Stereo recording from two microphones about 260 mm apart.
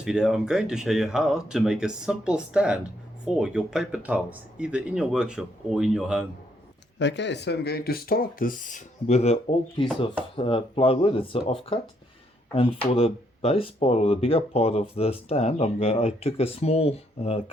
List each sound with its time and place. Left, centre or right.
0.0 s speech: centre
7.0 s speech: left